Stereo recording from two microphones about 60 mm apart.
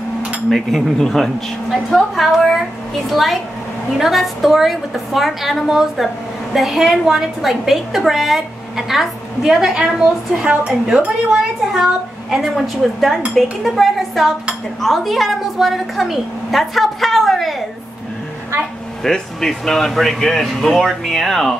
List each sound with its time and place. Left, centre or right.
0.5 s a woman's voice: centre
11.7 s a woman's voice: centre
19.0 s a woman's voice: centre